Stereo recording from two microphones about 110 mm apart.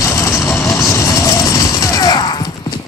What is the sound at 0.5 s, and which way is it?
Vehicle, centre (ahead or behind).